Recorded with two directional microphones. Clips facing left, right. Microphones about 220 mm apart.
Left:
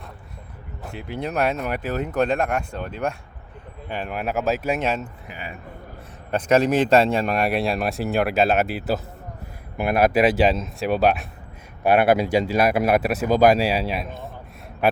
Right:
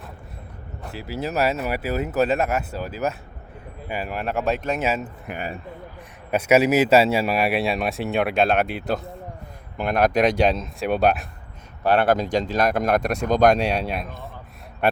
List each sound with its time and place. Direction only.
0.8 s speech: centre (ahead or behind)
4.8 s speech: 5° right (ahead or behind)
5.3 s speech: 55° right (ahead or behind)
6.3 s speech: 10° right (ahead or behind)
11.8 s speech: 10° left (ahead or behind)